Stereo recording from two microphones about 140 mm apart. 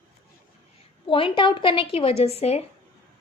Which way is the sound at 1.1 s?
35° left (ahead or behind).